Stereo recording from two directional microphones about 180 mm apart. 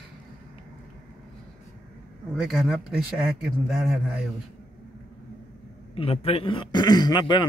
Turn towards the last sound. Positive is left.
turn(degrees=25)  # may be behind; listen again after turning